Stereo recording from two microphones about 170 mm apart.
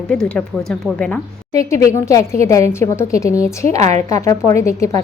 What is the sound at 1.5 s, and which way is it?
A woman's voice, 20° left (ahead or behind).